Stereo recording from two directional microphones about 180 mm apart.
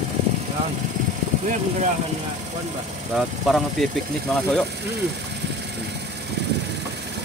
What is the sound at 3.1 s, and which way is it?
Speech, centre (ahead or behind).